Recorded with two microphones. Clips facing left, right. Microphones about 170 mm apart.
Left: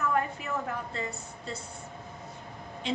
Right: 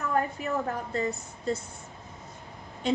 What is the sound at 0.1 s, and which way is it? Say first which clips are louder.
A woman's voice: right 2 dB; 35° right (ahead or behind).